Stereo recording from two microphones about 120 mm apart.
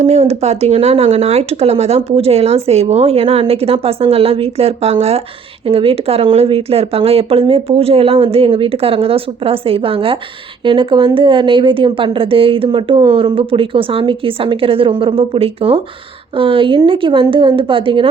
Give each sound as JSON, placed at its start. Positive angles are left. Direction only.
{"t": 0.0, "sound": "a woman's voice", "side_deg": -65}